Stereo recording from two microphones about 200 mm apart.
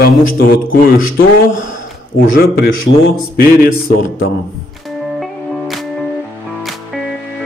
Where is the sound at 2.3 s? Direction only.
45° left (ahead or behind).